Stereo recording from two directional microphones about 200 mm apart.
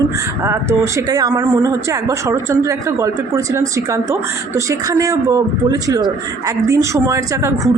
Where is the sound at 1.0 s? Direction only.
20° right (ahead or behind).